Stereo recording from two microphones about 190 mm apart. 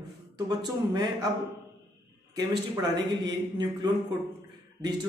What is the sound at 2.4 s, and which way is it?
Speech, 20° right (ahead or behind).